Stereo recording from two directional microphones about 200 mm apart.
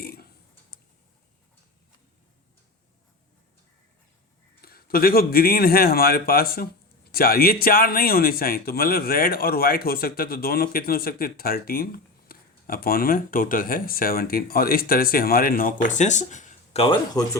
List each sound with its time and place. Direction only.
0.0 s burping: 50° left (ahead or behind)
4.6 s speech: 50° left (ahead or behind)
16.8 s a man's voice: 25° left (ahead or behind)